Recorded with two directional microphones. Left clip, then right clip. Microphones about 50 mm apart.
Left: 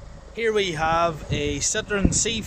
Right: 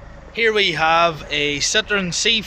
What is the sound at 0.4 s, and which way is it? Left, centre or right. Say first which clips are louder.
Speech: right 6 dB; left.